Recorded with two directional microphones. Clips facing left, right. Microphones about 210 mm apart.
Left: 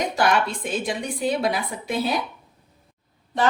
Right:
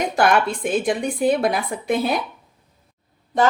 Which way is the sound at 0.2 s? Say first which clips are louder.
Right 4 dB; 55° right (ahead or behind).